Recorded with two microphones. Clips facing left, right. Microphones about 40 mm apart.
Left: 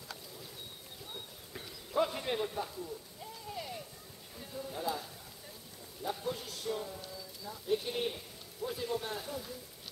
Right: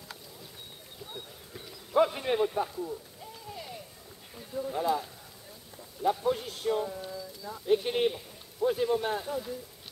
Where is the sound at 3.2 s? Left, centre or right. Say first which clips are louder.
Even; centre.